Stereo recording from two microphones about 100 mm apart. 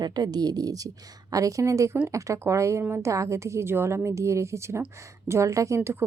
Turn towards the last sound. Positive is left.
turn(degrees=-25)  # may be behind; listen again after turning